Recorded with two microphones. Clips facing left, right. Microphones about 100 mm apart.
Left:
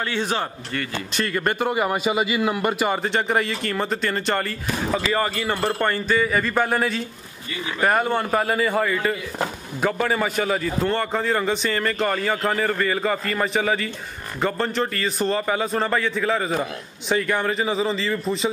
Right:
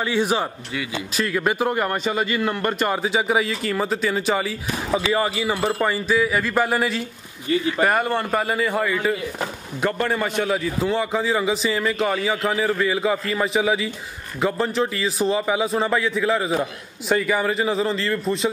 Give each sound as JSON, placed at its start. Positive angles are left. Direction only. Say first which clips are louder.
{"t": 0.0, "sound": "a man's voice", "louder": "right 3 dB", "side_deg": -10}